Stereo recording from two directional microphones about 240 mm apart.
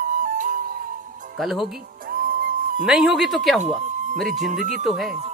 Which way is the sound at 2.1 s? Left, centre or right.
Right.